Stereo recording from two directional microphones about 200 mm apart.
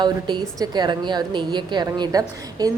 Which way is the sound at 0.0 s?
20° right (ahead or behind).